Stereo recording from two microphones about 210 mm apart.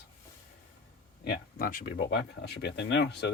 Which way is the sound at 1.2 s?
45° left (ahead or behind).